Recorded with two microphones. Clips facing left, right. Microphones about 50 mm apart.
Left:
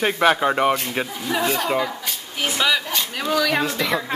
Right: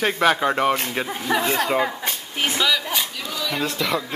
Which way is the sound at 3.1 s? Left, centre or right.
Left.